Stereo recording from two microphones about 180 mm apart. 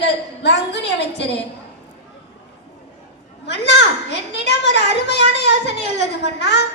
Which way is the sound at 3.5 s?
70° left (ahead or behind).